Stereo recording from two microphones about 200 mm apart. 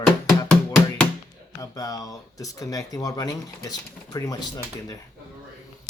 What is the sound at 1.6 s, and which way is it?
Speech, 15° left (ahead or behind).